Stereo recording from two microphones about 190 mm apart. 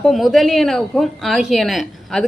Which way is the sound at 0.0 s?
Centre (ahead or behind).